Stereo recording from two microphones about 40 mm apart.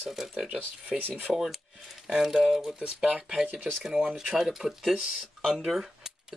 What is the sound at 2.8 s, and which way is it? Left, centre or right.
Speech, right.